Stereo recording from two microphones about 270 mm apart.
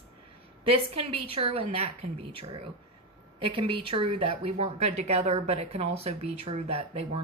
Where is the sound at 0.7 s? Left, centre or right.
Right.